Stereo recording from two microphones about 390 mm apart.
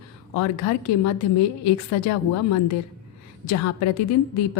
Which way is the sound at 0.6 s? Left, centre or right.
Left.